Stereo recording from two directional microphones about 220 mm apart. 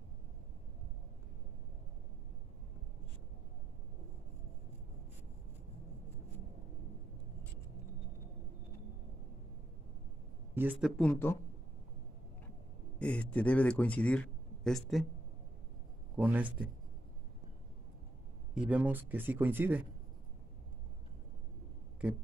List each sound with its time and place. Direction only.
10.5 s speech: 10° right (ahead or behind)
11.0 s speech: 10° left (ahead or behind)
13.0 s a man's voice: 5° left (ahead or behind)
16.2 s speech: 5° right (ahead or behind)
18.5 s speech: 5° right (ahead or behind)
22.0 s speech: 5° right (ahead or behind)